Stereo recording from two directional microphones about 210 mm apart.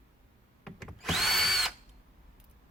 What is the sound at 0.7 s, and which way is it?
Drill, centre (ahead or behind).